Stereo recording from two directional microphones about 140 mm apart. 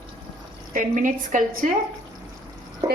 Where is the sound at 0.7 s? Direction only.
65° right (ahead or behind).